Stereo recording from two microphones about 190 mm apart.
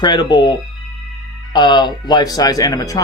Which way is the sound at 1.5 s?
20° left (ahead or behind).